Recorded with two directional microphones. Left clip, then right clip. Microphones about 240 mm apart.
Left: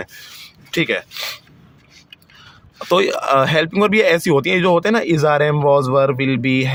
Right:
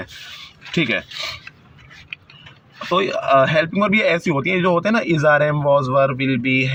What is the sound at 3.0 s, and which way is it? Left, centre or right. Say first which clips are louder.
Speech: right 2 dB; left.